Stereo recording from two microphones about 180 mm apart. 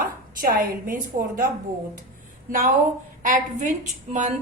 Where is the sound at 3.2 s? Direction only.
45° right (ahead or behind).